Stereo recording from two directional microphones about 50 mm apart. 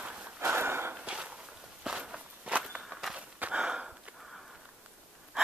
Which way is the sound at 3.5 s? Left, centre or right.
Centre.